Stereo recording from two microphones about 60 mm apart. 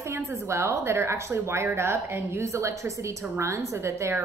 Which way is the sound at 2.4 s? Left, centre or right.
Right.